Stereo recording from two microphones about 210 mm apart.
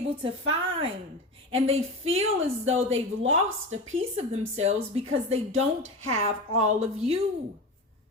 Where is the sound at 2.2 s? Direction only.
70° right (ahead or behind).